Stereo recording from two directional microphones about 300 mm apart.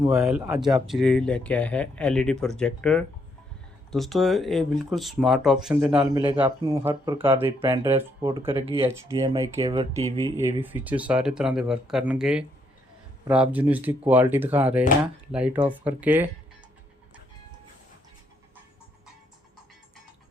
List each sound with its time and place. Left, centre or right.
0.0 s speech: centre
6.0 s speech: centre
10.3 s speech: centre